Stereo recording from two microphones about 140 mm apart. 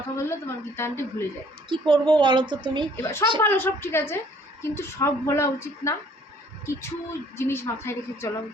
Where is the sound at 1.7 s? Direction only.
35° right (ahead or behind).